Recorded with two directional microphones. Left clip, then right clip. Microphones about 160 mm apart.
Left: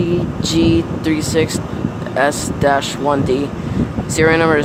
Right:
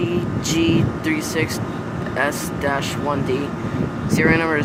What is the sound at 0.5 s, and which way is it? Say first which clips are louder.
Speech: left 4 dB; 20° left (ahead or behind).